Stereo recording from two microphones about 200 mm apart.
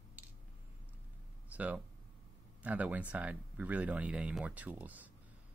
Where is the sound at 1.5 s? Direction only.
5° right (ahead or behind).